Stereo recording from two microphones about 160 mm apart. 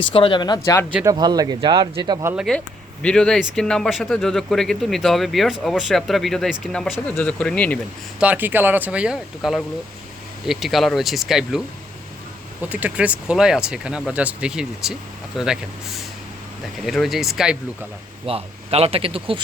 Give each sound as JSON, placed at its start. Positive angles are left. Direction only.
{"t": 0.0, "sound": "speech", "side_deg": 35}
{"t": 1.1, "sound": "speech", "side_deg": -25}
{"t": 2.2, "sound": "speech", "side_deg": -10}
{"t": 3.0, "sound": "speech", "side_deg": 5}
{"t": 8.2, "sound": "speech", "side_deg": -10}
{"t": 12.6, "sound": "speech", "side_deg": -10}
{"t": 16.8, "sound": "speech", "side_deg": 0}
{"t": 18.3, "sound": "speech", "side_deg": -40}